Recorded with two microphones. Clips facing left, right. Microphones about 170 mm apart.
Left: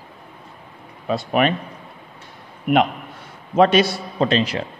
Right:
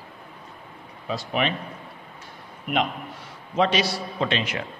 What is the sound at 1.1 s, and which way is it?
Speech, 55° left (ahead or behind).